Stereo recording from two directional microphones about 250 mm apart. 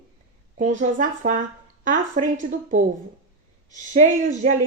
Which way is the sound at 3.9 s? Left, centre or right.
Right.